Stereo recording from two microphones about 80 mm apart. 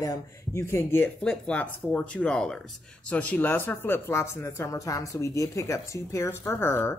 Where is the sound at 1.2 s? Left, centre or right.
Centre; by 6.9 s left.